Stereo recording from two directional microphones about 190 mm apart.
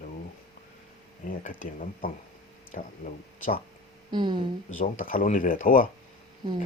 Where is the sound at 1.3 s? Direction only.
45° left (ahead or behind).